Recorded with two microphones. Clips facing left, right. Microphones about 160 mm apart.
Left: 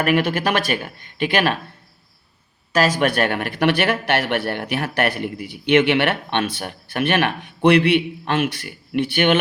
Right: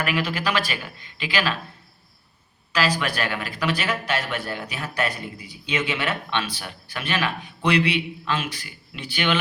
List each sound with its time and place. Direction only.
0.0 s speech: 50° left (ahead or behind)
2.7 s speech: 50° left (ahead or behind)